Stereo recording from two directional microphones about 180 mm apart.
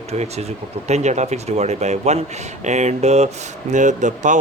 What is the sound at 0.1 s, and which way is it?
Speech, 35° right (ahead or behind).